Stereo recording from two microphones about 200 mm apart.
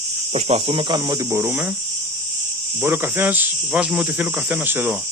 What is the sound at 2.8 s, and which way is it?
Speech, 10° right (ahead or behind).